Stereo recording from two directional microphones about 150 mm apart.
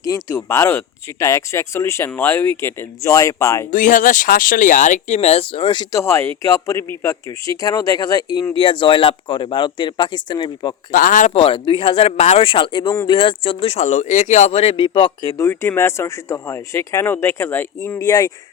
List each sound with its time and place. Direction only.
0.0 s speech: 20° left (ahead or behind)
3.7 s speech: 60° left (ahead or behind); by 10.8 s 30° left (ahead or behind)
10.9 s a man's voice: 65° left (ahead or behind)
11.3 s speech: 35° left (ahead or behind)
13.1 s speech: 35° left (ahead or behind)
13.7 s speech: 50° left (ahead or behind); by 15.4 s 30° left (ahead or behind)
15.4 s speech: 15° left (ahead or behind)